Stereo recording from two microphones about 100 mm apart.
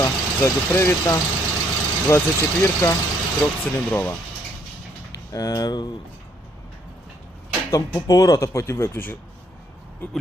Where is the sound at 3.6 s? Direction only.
20° left (ahead or behind).